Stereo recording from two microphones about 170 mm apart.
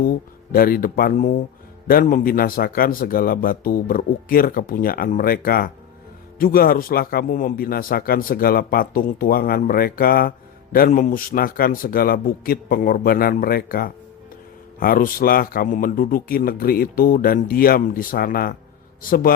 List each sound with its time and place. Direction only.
0.5 s a man's voice: 60° left (ahead or behind)